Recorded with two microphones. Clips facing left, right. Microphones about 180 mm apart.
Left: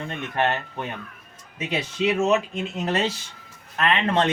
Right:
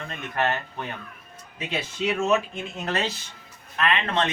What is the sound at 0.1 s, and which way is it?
Speech, 25° left (ahead or behind).